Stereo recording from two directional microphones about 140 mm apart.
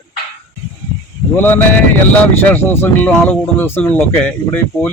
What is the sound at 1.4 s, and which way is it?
A man's voice, 15° left (ahead or behind).